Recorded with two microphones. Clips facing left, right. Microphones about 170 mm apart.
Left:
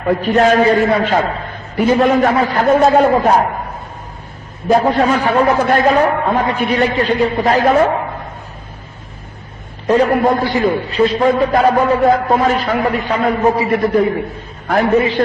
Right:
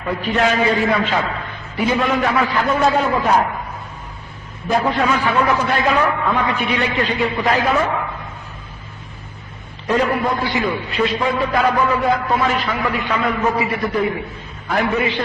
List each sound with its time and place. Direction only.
0.0 s a man's voice: 45° left (ahead or behind)
4.7 s a man's voice: 40° left (ahead or behind)
9.8 s a man's voice: 40° left (ahead or behind)
13.7 s a man's voice: 50° left (ahead or behind)